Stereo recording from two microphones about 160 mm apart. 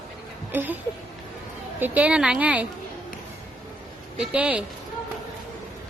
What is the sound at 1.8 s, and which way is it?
Speech, 10° right (ahead or behind).